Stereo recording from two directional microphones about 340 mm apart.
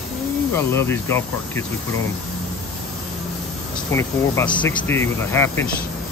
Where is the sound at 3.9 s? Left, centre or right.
Centre.